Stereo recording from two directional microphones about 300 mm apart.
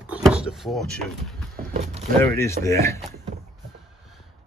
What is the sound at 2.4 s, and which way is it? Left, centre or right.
Speech, centre.